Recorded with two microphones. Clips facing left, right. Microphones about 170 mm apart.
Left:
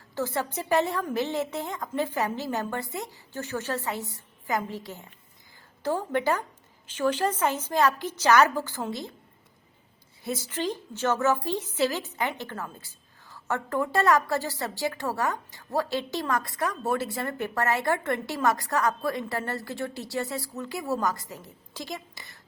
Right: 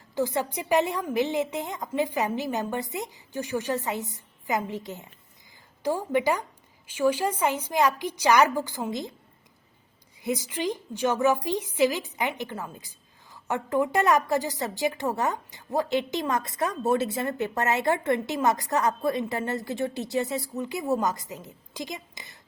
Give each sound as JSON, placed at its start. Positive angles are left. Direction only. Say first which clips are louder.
{"t": 0.1, "sound": "a woman's voice", "louder": "right 3 dB", "side_deg": -15}
{"t": 10.2, "sound": "a woman's voice", "louder": "right 2 dB", "side_deg": -15}